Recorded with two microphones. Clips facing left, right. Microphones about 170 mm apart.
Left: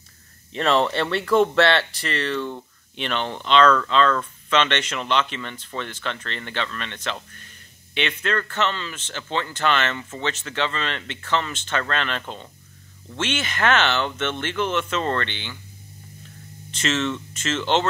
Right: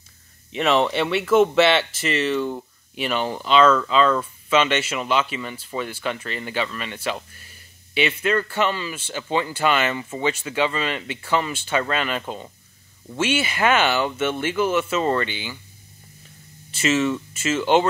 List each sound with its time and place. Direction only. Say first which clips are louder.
0.5 s speech: right 1 dB; 10° right (ahead or behind)
16.7 s speech: right 4 dB; 10° right (ahead or behind)